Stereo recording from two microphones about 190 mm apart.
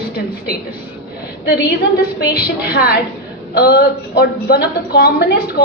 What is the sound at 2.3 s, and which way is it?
A woman's voice, 55° left (ahead or behind).